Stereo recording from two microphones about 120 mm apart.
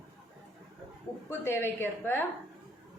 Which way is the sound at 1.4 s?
20° left (ahead or behind).